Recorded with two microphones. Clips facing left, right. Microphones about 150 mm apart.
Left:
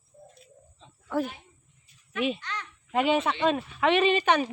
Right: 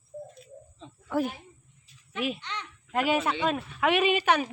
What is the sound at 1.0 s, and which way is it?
Speech, 5° right (ahead or behind).